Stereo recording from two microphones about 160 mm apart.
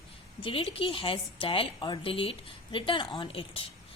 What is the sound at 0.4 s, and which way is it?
A woman's voice, 35° left (ahead or behind).